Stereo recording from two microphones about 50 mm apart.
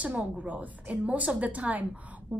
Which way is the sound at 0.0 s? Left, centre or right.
Right.